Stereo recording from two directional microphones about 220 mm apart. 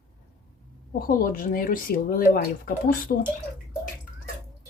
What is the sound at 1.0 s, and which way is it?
Speech, 40° left (ahead or behind).